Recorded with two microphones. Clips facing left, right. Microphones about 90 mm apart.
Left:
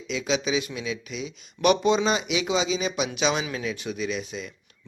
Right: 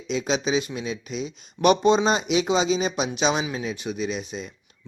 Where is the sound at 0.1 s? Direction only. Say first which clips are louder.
Right 2 dB; 35° right (ahead or behind).